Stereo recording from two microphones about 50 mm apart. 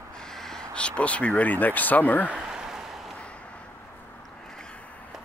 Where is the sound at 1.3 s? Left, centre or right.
Left.